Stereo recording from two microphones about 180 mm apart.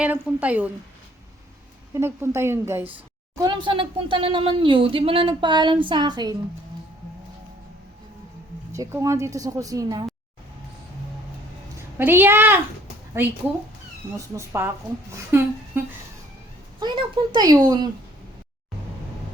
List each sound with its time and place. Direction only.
0.0 s a woman's voice: 10° right (ahead or behind)
1.9 s a woman's voice: 15° right (ahead or behind)
3.3 s speech: 25° right (ahead or behind)
8.7 s a woman's voice: 15° right (ahead or behind)
11.9 s a woman's voice: 10° right (ahead or behind)
14.3 s a woman's voice: 15° right (ahead or behind)
16.8 s speech: 25° right (ahead or behind)